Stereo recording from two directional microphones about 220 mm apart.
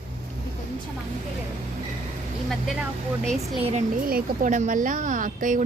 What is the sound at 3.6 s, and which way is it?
A woman's voice, 30° right (ahead or behind).